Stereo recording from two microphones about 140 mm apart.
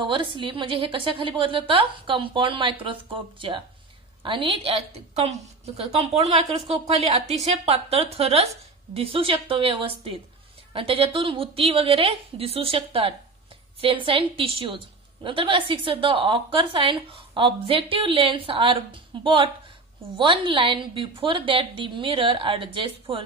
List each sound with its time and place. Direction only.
0.0 s a woman's voice: 35° right (ahead or behind)